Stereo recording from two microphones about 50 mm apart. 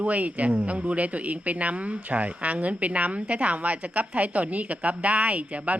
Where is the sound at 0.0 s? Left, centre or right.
Right.